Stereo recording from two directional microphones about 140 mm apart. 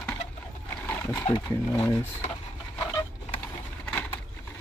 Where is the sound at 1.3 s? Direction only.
50° left (ahead or behind).